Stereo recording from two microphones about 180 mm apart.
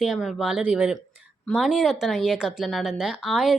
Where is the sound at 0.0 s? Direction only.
5° right (ahead or behind).